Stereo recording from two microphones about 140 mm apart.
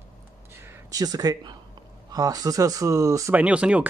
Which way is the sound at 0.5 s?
15° right (ahead or behind).